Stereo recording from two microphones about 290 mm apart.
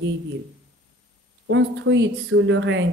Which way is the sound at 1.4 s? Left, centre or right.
Right.